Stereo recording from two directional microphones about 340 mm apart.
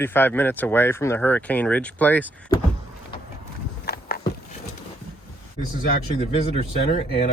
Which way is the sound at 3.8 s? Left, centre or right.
Left.